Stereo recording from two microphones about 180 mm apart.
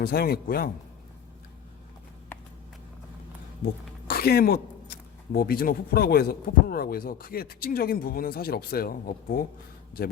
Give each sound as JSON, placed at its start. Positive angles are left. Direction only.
{"t": 0.0, "sound": "speech", "side_deg": 60}
{"t": 4.0, "sound": "speech", "side_deg": 60}